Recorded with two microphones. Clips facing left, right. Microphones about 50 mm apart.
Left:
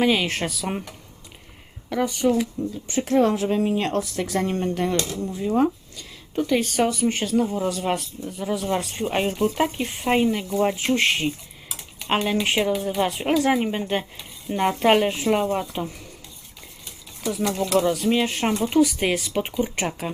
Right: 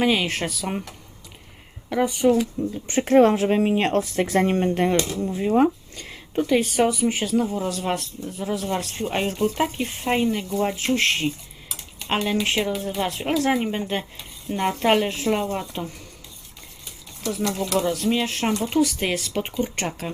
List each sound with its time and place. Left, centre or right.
0.0 s speech: centre
1.9 s speech: centre
2.8 s speech: right
6.3 s speech: centre
17.2 s speech: centre